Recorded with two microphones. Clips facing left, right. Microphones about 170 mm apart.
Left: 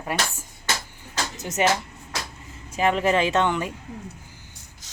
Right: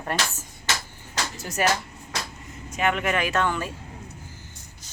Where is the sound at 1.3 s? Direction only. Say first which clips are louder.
Left 3 dB; 20° left (ahead or behind).